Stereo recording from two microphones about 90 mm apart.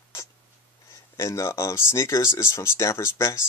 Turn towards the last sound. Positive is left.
turn(degrees=30)  # may be behind; listen again after turning